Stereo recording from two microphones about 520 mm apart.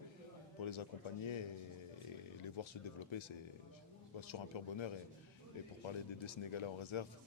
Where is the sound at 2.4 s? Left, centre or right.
Left.